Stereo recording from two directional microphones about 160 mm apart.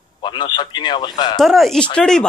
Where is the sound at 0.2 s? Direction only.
30° left (ahead or behind).